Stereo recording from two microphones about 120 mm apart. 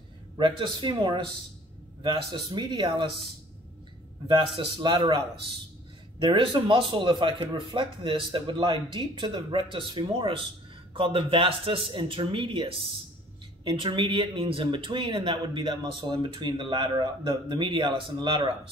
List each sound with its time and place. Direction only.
0.4 s speech: 40° right (ahead or behind)
2.3 s speech: 40° right (ahead or behind)
4.6 s speech: 45° right (ahead or behind)